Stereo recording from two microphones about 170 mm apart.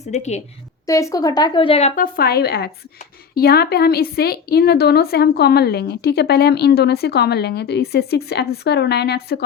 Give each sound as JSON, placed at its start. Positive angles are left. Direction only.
{"t": 0.0, "sound": "a woman's voice", "side_deg": 40}
{"t": 0.9, "sound": "speech", "side_deg": 20}
{"t": 2.0, "sound": "a woman's voice", "side_deg": 65}